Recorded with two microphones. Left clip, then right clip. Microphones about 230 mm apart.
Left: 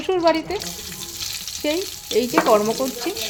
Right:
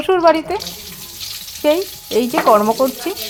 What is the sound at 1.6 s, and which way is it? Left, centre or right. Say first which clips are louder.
A woman's voice: right 9 dB; centre.